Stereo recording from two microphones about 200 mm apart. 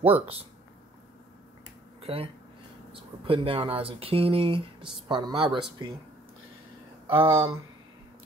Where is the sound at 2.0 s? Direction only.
30° right (ahead or behind).